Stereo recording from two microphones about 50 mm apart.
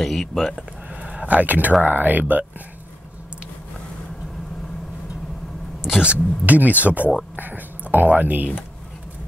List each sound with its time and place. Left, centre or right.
0.0 s speech: centre
1.0 s speech: right
5.8 s speech: centre
6.1 s speech: right